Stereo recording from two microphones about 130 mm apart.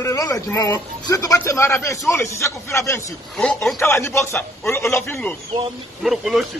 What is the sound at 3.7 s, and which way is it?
A man's voice, 20° left (ahead or behind).